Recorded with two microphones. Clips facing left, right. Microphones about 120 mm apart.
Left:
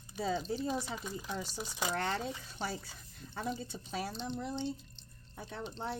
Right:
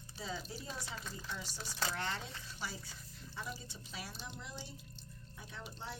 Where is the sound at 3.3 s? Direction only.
55° left (ahead or behind).